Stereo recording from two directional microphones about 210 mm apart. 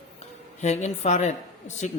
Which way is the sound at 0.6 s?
35° left (ahead or behind).